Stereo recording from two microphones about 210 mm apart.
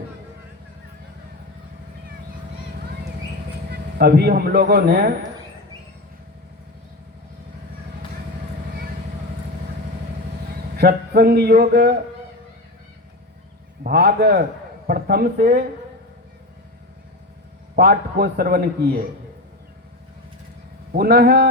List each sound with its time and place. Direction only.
3.7 s a man's voice: 50° right (ahead or behind)
10.5 s speech: 45° right (ahead or behind)
13.8 s a man's voice: 50° right (ahead or behind)
17.7 s a man's voice: 50° right (ahead or behind)
20.9 s a man's voice: 45° right (ahead or behind)